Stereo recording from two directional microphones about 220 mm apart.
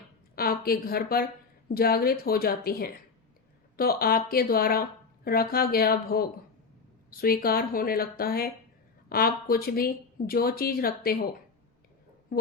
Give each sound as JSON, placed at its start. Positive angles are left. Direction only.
{"t": 0.3, "sound": "a woman's voice", "side_deg": 45}
{"t": 12.3, "sound": "speech", "side_deg": 45}